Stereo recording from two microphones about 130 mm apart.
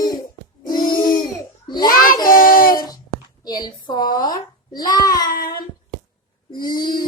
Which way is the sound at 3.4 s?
30° left (ahead or behind).